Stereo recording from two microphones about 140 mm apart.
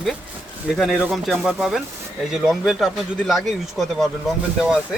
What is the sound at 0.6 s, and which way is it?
Speech, centre (ahead or behind).